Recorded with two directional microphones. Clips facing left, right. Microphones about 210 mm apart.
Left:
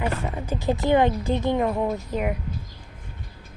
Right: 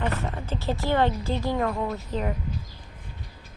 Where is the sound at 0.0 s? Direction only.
10° left (ahead or behind).